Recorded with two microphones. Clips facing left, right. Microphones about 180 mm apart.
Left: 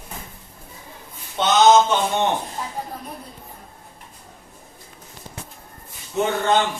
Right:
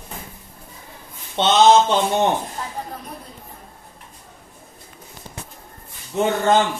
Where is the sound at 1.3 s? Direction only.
30° right (ahead or behind).